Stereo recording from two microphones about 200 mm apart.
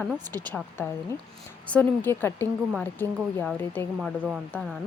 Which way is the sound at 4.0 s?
Centre (ahead or behind).